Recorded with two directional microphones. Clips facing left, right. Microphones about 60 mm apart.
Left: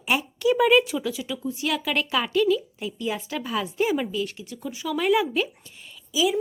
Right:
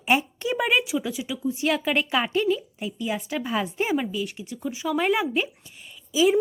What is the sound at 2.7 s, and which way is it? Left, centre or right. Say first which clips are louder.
Speech: even; centre.